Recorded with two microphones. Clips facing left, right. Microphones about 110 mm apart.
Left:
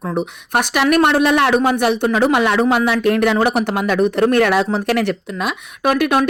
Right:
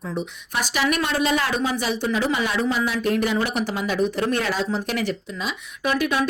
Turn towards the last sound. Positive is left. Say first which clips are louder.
# left 7 dB
turn(degrees=65)  # may be behind; listen again after turning